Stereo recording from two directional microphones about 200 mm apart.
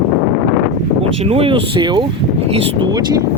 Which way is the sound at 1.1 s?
30° right (ahead or behind).